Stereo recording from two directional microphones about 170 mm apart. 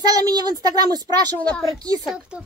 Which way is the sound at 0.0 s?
25° right (ahead or behind).